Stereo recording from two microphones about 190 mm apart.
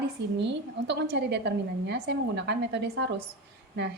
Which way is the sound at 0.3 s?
65° right (ahead or behind).